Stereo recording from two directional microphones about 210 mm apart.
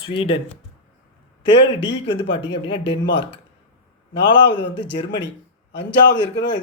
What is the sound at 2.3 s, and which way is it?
Speech, 25° left (ahead or behind).